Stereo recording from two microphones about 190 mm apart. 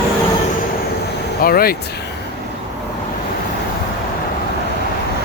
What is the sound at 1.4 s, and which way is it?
Speech, 50° left (ahead or behind).